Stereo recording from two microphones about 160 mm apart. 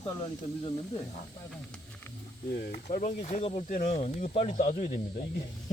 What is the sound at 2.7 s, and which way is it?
Speech, 55° left (ahead or behind).